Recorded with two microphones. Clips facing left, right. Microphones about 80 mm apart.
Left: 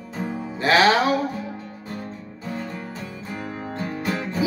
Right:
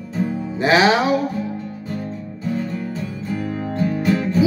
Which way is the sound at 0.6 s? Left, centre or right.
Centre.